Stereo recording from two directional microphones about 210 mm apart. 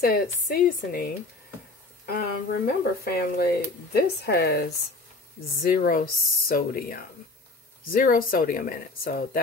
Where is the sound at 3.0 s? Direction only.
50° left (ahead or behind).